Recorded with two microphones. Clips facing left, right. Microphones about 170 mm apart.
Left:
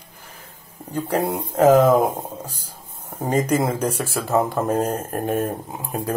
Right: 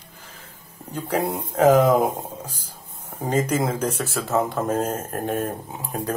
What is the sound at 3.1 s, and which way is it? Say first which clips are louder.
Speech: left 2 dB; 10° left (ahead or behind).